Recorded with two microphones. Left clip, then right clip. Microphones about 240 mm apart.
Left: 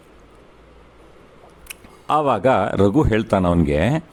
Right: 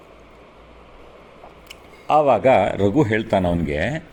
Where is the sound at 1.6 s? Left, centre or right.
Left.